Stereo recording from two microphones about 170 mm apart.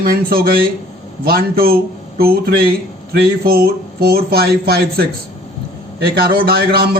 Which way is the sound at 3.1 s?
65° right (ahead or behind).